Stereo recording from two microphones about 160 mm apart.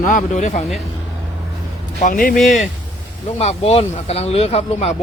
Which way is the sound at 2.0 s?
60° left (ahead or behind).